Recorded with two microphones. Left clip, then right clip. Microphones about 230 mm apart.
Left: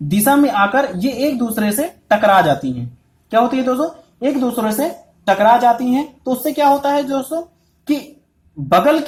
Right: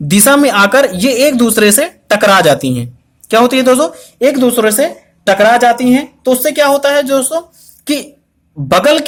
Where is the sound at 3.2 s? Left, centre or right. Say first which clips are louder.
Right 7 dB; right.